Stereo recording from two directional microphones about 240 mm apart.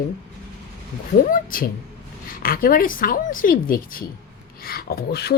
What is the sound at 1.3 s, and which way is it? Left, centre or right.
A woman's voice, left.